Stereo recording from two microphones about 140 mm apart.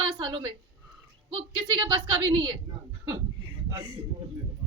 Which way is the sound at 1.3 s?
40° right (ahead or behind).